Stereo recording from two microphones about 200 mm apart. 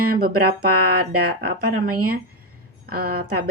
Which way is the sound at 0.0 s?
50° right (ahead or behind).